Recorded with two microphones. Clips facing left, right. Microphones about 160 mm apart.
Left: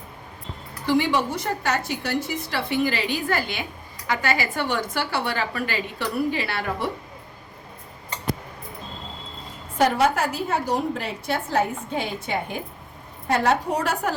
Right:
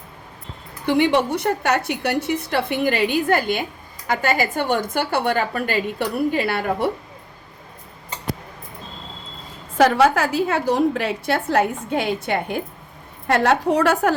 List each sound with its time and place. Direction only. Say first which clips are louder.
0.9 s a woman's voice: right 4 dB; 60° right (ahead or behind)
9.7 s a woman's voice: right 4 dB; 90° right; by 12.6 s 60° right (ahead or behind)
13.2 s a woman's voice: right 4 dB; 80° right